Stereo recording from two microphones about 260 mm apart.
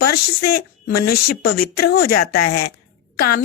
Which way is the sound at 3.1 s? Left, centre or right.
Left.